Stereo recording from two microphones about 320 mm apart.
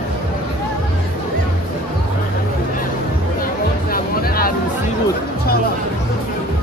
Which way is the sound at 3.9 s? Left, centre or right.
Left.